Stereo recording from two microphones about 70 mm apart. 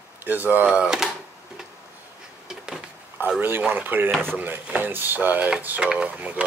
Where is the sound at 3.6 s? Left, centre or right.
Right.